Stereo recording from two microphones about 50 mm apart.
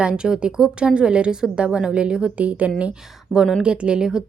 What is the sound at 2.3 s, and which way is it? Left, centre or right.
A woman's voice, right.